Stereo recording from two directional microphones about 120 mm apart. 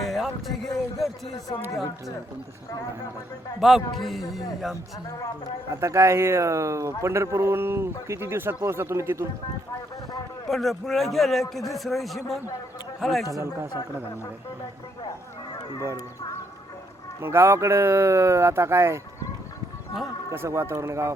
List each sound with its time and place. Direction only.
0.0 s speech: centre (ahead or behind)
3.6 s a man's voice: centre (ahead or behind)
5.8 s a man's voice: 25° right (ahead or behind)
10.5 s a man's voice: centre (ahead or behind)
13.3 s a man's voice: 20° right (ahead or behind)
17.2 s a man's voice: 20° right (ahead or behind)
20.3 s a man's voice: 20° right (ahead or behind)